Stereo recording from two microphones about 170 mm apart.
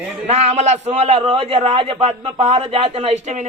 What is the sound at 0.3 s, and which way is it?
A man's voice, 40° right (ahead or behind).